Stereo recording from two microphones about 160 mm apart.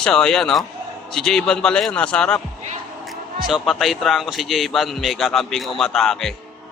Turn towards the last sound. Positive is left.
turn(degrees=0)  # may be behind; listen again after turning